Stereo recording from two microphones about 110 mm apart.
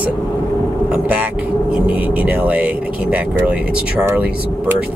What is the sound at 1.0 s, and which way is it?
Speech, 15° right (ahead or behind).